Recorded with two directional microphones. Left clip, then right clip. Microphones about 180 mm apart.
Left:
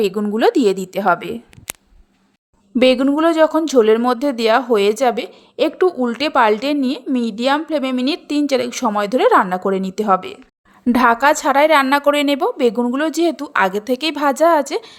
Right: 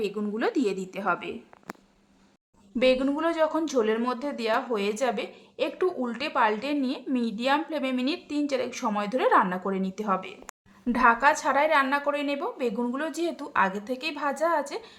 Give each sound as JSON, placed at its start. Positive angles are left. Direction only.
{"t": 0.0, "sound": "speech", "side_deg": 45}
{"t": 2.7, "sound": "speech", "side_deg": 40}